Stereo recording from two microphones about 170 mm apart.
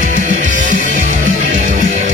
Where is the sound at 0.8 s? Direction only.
50° left (ahead or behind).